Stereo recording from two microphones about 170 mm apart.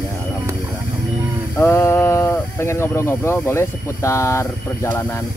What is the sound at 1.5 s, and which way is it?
Speech, 15° left (ahead or behind).